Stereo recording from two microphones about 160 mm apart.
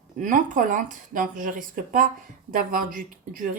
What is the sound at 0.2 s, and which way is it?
Speech, 55° right (ahead or behind).